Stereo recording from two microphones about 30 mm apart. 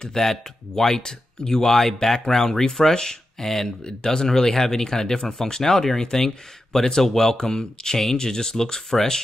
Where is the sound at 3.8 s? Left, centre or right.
Left.